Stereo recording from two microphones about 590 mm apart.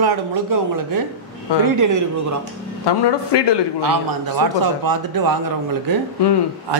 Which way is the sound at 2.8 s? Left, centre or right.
Left.